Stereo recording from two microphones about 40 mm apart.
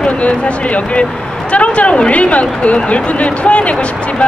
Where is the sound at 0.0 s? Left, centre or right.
Left.